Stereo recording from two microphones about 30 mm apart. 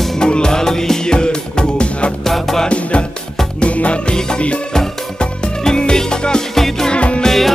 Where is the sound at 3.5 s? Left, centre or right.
Left.